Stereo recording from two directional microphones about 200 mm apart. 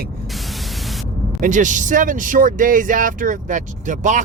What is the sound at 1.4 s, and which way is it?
Speech, 40° right (ahead or behind).